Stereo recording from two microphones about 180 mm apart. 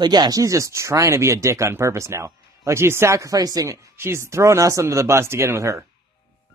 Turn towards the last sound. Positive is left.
turn(degrees=-15)  # may be behind; listen again after turning